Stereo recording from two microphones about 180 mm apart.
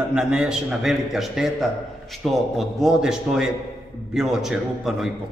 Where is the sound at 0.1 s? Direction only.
5° right (ahead or behind).